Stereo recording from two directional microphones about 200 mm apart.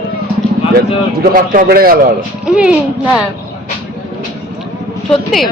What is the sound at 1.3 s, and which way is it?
Speech, 45° right (ahead or behind).